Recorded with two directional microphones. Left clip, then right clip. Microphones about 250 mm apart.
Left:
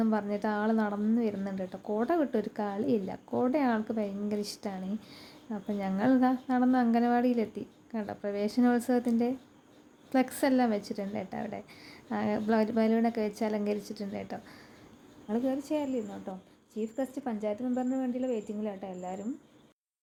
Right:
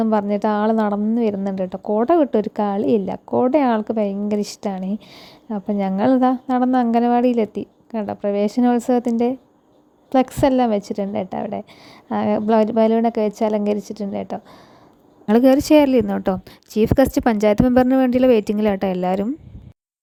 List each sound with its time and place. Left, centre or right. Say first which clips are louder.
0.0 s a woman's voice: right 12 dB; right
15.3 s a woman's voice: right 18 dB; right